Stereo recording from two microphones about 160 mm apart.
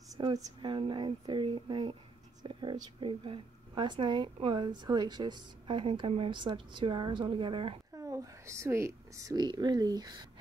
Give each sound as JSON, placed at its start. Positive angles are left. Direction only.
{"t": 0.1, "sound": "a woman's voice", "side_deg": -25}
{"t": 7.9, "sound": "speech", "side_deg": -20}